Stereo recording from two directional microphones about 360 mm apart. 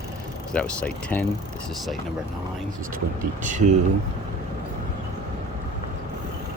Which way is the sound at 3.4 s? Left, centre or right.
Right.